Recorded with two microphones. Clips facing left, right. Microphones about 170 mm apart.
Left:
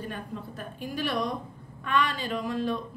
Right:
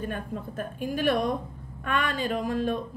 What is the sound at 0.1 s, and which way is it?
A woman's voice, 50° right (ahead or behind).